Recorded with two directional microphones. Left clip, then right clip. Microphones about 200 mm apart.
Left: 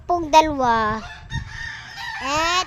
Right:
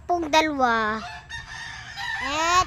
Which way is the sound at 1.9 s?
30° left (ahead or behind).